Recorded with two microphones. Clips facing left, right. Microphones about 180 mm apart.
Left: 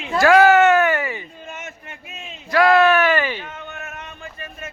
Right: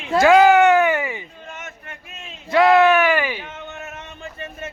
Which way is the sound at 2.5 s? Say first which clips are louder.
Right 1 dB; 20° right (ahead or behind).